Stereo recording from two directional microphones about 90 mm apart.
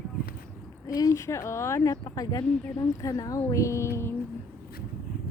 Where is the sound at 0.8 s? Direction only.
40° left (ahead or behind).